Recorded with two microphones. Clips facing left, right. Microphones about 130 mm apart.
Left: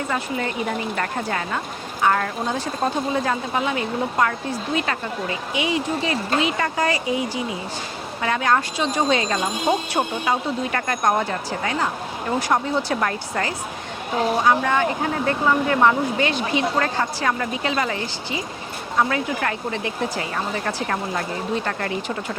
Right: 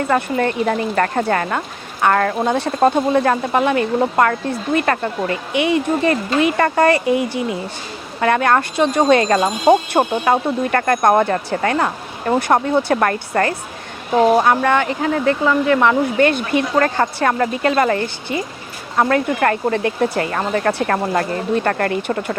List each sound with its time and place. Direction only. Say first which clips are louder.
0.1 s speech: right 8 dB; 60° right (ahead or behind); by 16.0 s 90° right
16.1 s speech: right 6 dB; 55° right (ahead or behind)